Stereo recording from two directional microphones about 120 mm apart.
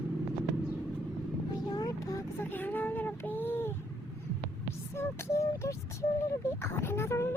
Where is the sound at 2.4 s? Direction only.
15° left (ahead or behind).